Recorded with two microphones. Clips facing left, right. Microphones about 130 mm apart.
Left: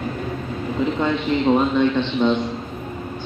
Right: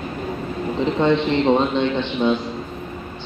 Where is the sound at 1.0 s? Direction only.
30° right (ahead or behind).